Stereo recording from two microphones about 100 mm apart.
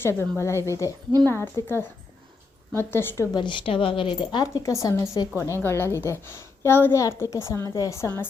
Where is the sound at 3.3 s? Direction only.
55° left (ahead or behind).